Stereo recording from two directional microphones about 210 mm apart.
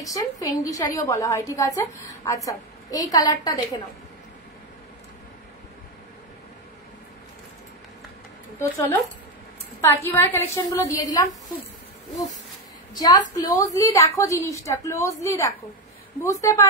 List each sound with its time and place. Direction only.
0.0 s a woman's voice: 15° left (ahead or behind)
8.5 s a woman's voice: 10° left (ahead or behind)
12.9 s a woman's voice: 20° left (ahead or behind)